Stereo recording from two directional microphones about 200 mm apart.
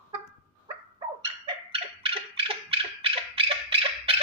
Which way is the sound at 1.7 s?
25° right (ahead or behind).